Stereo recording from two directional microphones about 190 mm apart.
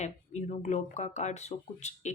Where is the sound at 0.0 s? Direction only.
40° left (ahead or behind).